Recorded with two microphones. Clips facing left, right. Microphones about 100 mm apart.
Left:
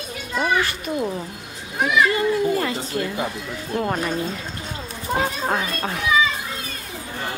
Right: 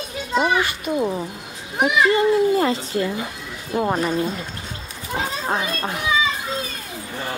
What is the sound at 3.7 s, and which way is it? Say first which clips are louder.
Speech: right 3 dB; 10° right (ahead or behind).